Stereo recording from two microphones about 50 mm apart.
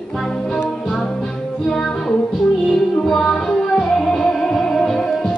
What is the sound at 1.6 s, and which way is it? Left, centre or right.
Music, centre.